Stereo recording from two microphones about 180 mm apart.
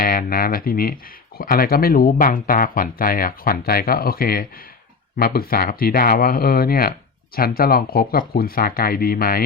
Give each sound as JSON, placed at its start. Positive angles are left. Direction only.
{"t": 0.0, "sound": "speech", "side_deg": 55}